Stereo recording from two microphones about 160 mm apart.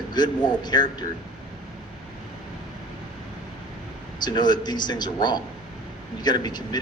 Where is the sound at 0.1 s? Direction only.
25° left (ahead or behind).